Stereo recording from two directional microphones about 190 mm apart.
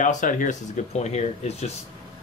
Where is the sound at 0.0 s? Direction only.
45° left (ahead or behind).